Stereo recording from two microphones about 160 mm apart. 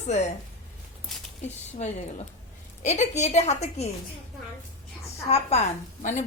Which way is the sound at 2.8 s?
45° left (ahead or behind).